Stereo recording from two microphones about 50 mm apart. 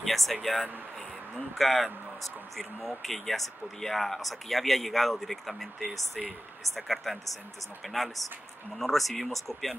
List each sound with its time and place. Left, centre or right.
0.0 s speech: centre